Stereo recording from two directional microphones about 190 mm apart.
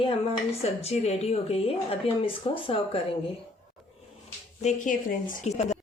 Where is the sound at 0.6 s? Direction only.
35° left (ahead or behind).